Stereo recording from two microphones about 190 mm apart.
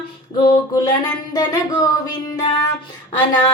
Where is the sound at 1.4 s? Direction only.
20° left (ahead or behind).